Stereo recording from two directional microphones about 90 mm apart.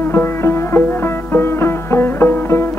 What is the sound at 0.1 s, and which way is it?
Music, 25° left (ahead or behind).